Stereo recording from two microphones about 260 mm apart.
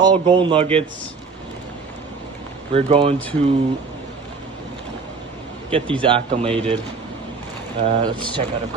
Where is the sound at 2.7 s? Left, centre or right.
Right.